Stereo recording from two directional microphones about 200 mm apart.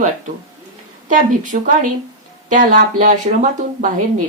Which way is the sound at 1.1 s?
40° right (ahead or behind).